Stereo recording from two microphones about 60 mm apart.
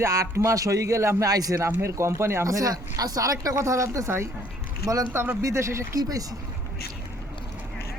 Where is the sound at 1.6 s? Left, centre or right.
Right.